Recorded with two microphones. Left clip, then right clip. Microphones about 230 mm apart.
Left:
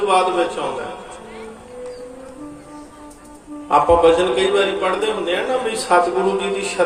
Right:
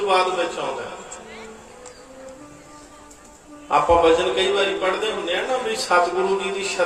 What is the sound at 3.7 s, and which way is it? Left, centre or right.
Speech, left.